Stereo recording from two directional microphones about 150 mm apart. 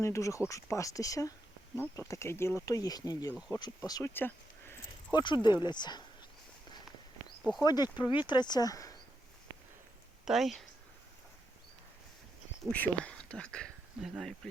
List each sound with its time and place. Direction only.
0.0 s speech: 20° left (ahead or behind)
4.1 s a sound: 15° left (ahead or behind)
5.1 s speech: 30° left (ahead or behind)
7.6 s speech: 25° left (ahead or behind)
10.2 s speech: centre (ahead or behind)
12.7 s speech: 10° left (ahead or behind)